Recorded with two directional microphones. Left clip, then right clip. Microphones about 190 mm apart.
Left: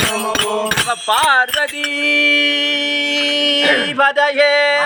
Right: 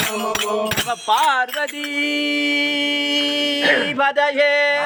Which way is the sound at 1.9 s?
20° right (ahead or behind).